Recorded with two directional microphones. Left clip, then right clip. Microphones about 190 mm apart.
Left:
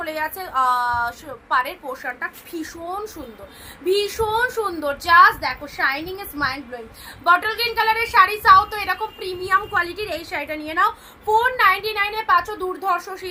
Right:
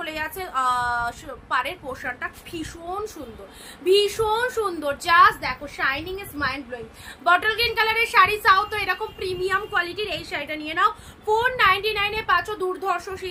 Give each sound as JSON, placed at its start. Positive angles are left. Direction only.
{"t": 0.0, "sound": "a woman's voice", "side_deg": -20}